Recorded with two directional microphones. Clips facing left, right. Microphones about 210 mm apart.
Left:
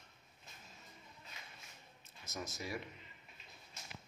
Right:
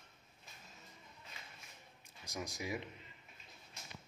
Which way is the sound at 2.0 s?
15° right (ahead or behind).